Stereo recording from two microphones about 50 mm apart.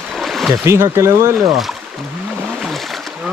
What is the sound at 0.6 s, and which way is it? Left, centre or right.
Speech, right.